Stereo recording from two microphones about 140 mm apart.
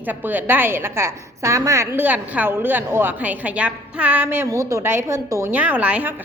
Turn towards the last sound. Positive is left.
turn(degrees=-10)  # may be behind; listen again after turning